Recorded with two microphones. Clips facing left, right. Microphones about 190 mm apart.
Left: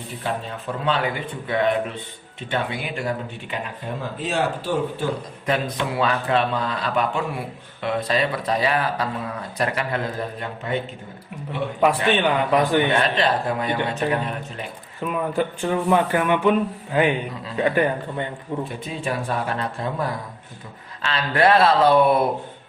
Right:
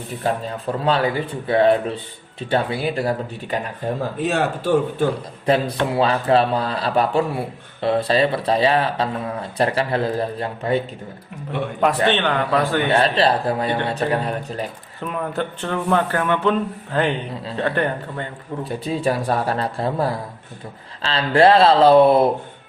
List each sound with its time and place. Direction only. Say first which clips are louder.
0.2 s a man's voice: right 5 dB; 40° right (ahead or behind)
4.2 s speech: right 1 dB; 55° right (ahead or behind)
5.5 s a man's voice: right 5 dB; 30° right (ahead or behind)
12.1 s speech: left 1 dB; 10° left (ahead or behind)
12.9 s a man's voice: right 3 dB; 35° right (ahead or behind)
15.0 s speech: left 2 dB; 5° left (ahead or behind)
18.6 s a man's voice: right 6 dB; 35° right (ahead or behind)